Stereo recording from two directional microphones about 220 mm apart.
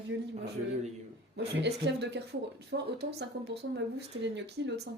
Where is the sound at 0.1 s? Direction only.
55° right (ahead or behind).